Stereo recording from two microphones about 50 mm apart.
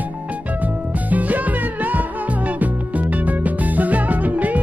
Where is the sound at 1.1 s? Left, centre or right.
Right.